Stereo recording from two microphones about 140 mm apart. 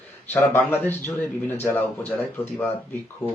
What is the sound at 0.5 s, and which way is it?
A man's voice, 15° left (ahead or behind).